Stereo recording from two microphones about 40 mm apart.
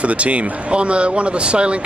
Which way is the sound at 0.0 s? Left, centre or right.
Right.